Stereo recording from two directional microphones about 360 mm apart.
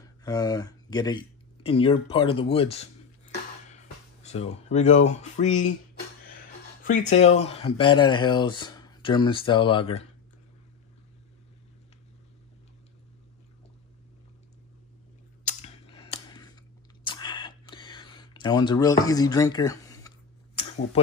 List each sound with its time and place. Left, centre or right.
0.2 s speech: centre
4.2 s speech: centre
6.8 s speech: left
15.4 s a sound: centre